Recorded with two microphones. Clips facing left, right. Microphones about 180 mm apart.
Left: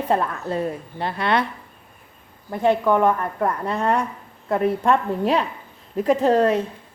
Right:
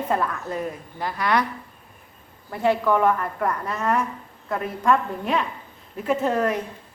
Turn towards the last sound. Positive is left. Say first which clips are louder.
# left 5 dB
turn(degrees=30)  # may be behind; listen again after turning